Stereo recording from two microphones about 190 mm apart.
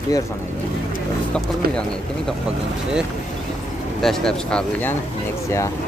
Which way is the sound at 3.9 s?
Centre (ahead or behind).